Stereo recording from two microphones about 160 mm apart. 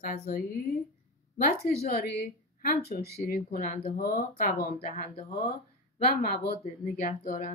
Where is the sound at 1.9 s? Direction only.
75° left (ahead or behind).